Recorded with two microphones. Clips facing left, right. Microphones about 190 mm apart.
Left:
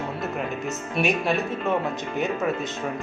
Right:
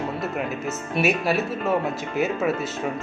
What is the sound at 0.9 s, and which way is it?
Speech, 5° right (ahead or behind).